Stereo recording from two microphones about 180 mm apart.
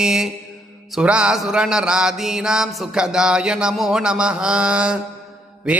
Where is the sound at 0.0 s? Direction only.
5° right (ahead or behind).